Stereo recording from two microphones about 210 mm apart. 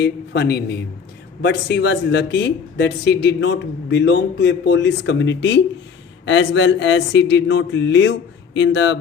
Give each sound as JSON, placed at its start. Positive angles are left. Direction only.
{"t": 0.0, "sound": "a man's voice", "side_deg": 50}